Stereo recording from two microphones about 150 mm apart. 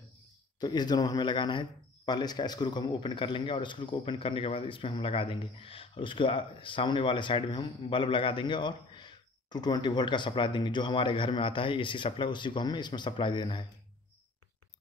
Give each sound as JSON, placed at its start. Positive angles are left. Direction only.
{"t": 0.6, "sound": "speech", "side_deg": 25}